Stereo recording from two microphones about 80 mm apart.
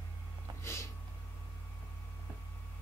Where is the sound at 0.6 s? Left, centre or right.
Left.